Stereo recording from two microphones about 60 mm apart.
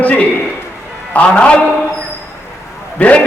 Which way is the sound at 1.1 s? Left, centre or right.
Left.